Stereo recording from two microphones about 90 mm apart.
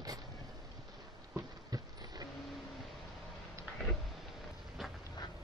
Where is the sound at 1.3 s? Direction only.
45° right (ahead or behind).